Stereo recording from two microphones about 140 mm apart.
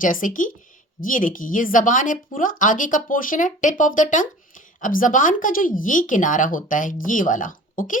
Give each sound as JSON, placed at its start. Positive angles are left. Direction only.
{"t": 0.0, "sound": "a woman's voice", "side_deg": 75}